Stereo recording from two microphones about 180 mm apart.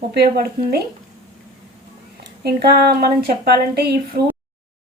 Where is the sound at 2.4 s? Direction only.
65° right (ahead or behind).